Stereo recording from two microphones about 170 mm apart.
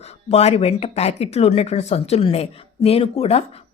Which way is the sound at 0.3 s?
40° left (ahead or behind).